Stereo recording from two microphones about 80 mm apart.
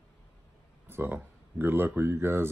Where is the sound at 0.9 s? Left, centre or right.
Right.